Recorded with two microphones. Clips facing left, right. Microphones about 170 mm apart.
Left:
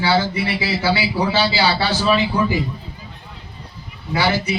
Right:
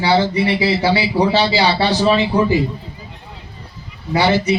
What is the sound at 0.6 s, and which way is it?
A man's voice, 30° right (ahead or behind).